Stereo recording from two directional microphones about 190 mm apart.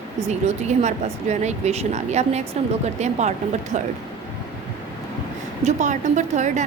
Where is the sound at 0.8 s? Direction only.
40° right (ahead or behind).